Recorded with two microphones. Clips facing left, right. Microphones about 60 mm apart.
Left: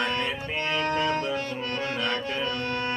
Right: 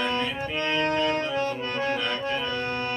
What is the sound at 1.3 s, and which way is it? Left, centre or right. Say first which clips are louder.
Music: right 2 dB; right.